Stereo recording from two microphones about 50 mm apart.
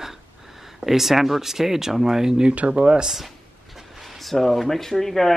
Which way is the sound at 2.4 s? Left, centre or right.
Right.